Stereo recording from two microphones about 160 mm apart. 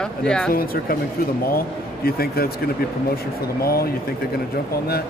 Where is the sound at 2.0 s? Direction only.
70° left (ahead or behind).